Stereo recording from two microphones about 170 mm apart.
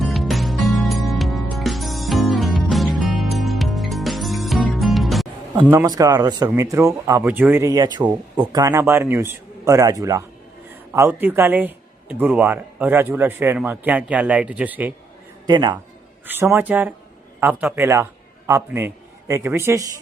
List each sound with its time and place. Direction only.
0.0 s music: centre (ahead or behind)
5.8 s speech: 20° right (ahead or behind)
15.4 s speech: 25° right (ahead or behind)
16.2 s a man's voice: 10° right (ahead or behind)